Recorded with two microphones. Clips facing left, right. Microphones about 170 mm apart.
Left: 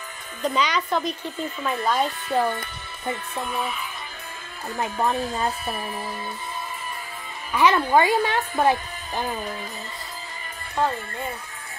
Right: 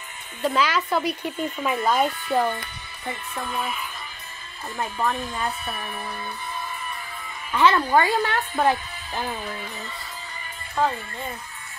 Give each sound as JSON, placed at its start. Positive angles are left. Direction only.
{"t": 0.4, "sound": "speech", "side_deg": -5}
{"t": 4.7, "sound": "speech", "side_deg": 15}
{"t": 5.3, "sound": "speech", "side_deg": 35}
{"t": 7.5, "sound": "speech", "side_deg": 15}